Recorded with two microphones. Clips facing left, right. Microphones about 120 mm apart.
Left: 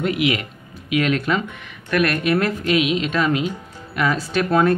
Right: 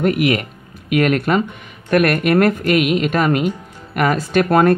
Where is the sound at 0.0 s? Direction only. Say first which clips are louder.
Right 4 dB; 50° right (ahead or behind).